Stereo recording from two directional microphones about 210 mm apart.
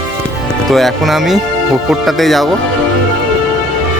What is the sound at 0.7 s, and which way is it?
Speech, centre (ahead or behind).